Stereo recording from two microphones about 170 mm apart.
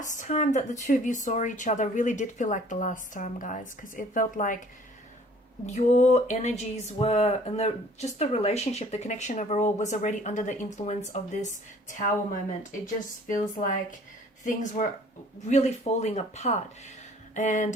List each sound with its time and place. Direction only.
0.0 s speech: 45° left (ahead or behind)
5.6 s speech: 45° left (ahead or behind)
11.9 s speech: 50° left (ahead or behind)